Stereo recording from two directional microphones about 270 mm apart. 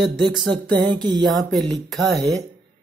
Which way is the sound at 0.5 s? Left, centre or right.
Centre.